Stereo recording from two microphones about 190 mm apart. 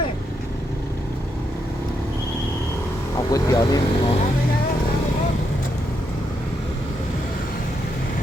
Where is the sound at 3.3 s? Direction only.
20° left (ahead or behind).